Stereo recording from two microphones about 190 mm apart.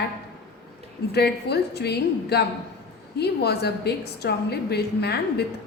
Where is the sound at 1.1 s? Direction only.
60° left (ahead or behind).